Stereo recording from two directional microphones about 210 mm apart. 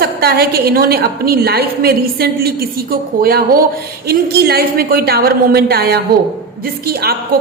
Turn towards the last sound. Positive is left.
turn(degrees=-50)  # may be behind; listen again after turning